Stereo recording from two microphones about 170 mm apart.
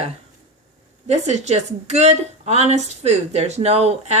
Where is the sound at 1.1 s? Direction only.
40° right (ahead or behind).